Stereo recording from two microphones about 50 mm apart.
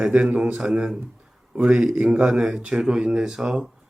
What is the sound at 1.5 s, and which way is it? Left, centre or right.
Speech, right.